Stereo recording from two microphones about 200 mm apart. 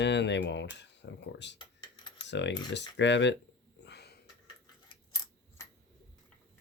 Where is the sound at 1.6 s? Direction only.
20° left (ahead or behind).